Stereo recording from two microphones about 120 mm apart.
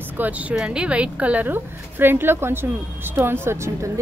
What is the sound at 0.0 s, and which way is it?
Speech, 15° right (ahead or behind).